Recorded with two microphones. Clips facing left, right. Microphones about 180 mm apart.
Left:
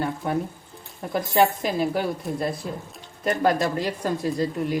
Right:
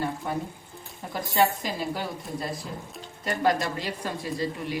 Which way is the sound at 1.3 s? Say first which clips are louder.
Left 3 dB; 55° left (ahead or behind).